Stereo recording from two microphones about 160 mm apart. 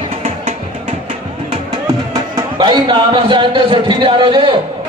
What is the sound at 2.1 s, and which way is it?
A man's voice, 25° right (ahead or behind).